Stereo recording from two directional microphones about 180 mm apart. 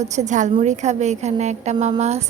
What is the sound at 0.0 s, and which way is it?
A woman's voice, 40° right (ahead or behind).